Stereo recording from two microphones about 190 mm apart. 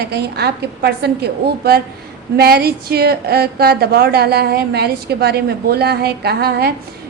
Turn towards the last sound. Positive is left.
turn(degrees=-55)  # may be behind; listen again after turning